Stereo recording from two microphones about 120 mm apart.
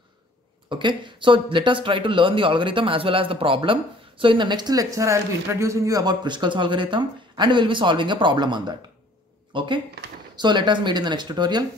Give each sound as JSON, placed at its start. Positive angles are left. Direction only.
{"t": 0.7, "sound": "speech", "side_deg": -40}